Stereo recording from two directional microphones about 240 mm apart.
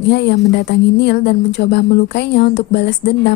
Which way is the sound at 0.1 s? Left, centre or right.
Left.